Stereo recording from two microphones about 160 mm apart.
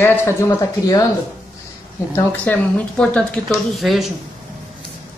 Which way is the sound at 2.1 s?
10° left (ahead or behind).